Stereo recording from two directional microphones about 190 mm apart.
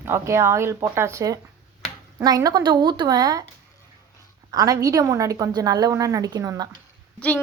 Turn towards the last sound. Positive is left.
turn(degrees=5)  # may be behind; listen again after turning